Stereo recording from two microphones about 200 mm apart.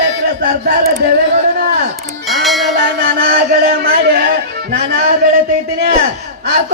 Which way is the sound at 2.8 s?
50° right (ahead or behind).